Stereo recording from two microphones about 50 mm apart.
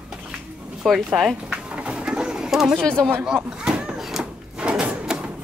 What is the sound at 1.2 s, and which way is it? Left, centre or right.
Speech, centre.